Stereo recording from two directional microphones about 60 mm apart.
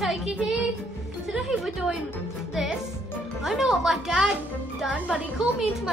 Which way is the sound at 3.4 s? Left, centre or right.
Centre.